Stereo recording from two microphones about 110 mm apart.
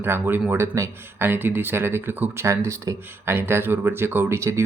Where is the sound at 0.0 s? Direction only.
20° right (ahead or behind).